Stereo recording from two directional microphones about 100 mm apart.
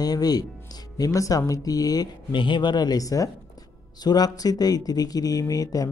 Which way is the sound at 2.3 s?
55° left (ahead or behind).